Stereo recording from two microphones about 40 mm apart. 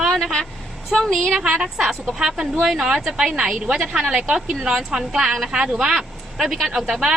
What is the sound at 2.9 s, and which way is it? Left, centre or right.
A woman's voice, centre.